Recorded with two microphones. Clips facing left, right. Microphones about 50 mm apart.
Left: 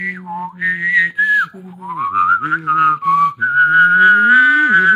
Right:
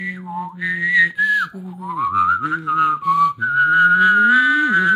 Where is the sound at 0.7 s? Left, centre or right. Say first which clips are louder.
Left 1 dB; left.